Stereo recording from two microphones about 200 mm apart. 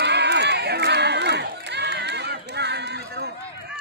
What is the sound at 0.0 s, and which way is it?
Crowd, 60° right (ahead or behind).